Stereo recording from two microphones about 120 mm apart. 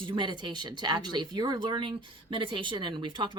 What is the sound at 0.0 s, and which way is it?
Speech, 40° right (ahead or behind).